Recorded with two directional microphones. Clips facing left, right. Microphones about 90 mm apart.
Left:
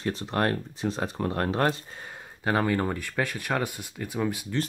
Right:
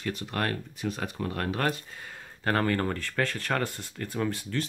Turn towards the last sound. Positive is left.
turn(degrees=10)  # may be behind; listen again after turning